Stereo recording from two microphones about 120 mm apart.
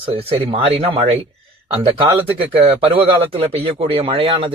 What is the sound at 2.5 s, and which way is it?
Speech, 50° right (ahead or behind).